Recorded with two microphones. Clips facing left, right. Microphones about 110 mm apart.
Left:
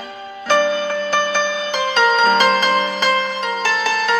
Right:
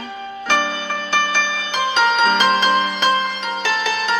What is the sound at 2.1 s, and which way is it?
Music, 40° left (ahead or behind).